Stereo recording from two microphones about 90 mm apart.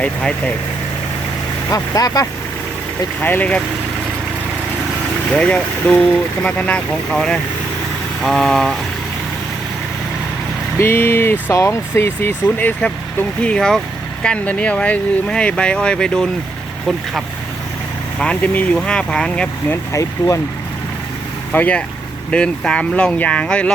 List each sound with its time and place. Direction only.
0.0 s speech: 10° left (ahead or behind)
1.7 s speech: 45° left (ahead or behind)
3.2 s speech: 20° left (ahead or behind)
5.3 s speech: 15° left (ahead or behind)
10.8 s speech: 25° left (ahead or behind)
13.4 s speech: 10° left (ahead or behind)
18.2 s speech: 15° left (ahead or behind)
19.7 s speech: 35° left (ahead or behind)
21.5 s speech: 15° left (ahead or behind)